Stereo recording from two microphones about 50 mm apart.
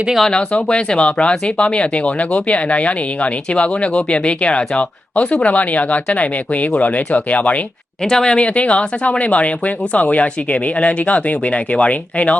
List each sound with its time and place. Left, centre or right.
0.3 s speech: left
8.0 s speech: centre